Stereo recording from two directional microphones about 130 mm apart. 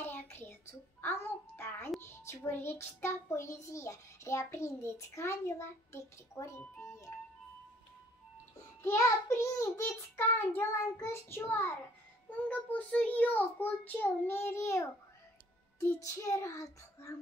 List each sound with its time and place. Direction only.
0.0 s a sound: 15° left (ahead or behind)
2.0 s child singing: 20° left (ahead or behind)
8.8 s child singing: 20° left (ahead or behind)
12.3 s a child's voice: 10° left (ahead or behind)
15.8 s child singing: 25° left (ahead or behind)